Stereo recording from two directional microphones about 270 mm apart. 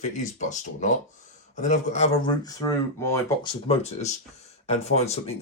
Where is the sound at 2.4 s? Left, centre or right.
Centre.